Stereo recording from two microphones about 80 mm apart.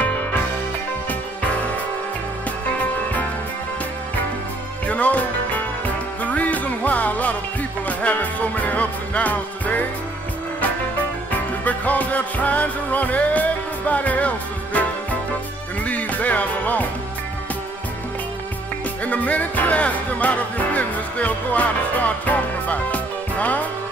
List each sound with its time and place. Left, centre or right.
4.8 s music: centre
6.2 s music: centre
11.6 s music: centre
19.0 s music: centre